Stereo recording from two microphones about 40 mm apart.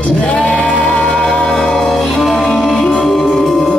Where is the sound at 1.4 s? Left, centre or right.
Centre.